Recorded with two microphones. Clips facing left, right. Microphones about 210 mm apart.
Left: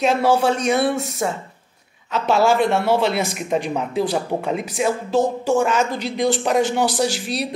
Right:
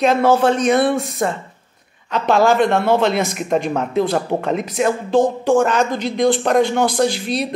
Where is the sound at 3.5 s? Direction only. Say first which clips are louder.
Right 3 dB; 50° right (ahead or behind).